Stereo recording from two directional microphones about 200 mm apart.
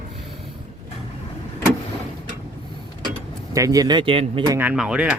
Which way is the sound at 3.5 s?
15° right (ahead or behind).